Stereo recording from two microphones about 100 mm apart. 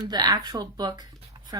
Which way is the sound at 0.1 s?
40° right (ahead or behind).